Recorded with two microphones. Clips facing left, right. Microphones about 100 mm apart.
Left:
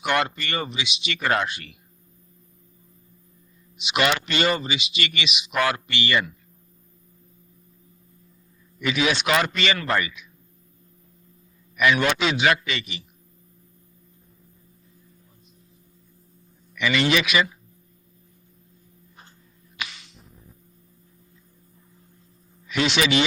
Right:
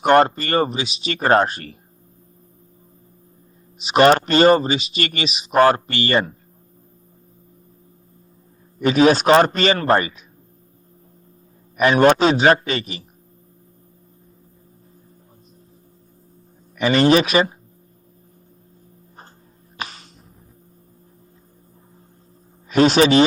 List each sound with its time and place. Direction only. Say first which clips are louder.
0.0 s speech: right 10 dB; 40° right (ahead or behind)
3.8 s speech: right 10 dB; 40° right (ahead or behind)
8.8 s speech: right 9 dB; 40° right (ahead or behind)
11.8 s speech: right 7 dB; 40° right (ahead or behind)
16.7 s speech: right 7 dB; 40° right (ahead or behind)
19.7 s a sound: right 4 dB; 40° right (ahead or behind)
22.7 s speech: right 9 dB; 40° right (ahead or behind)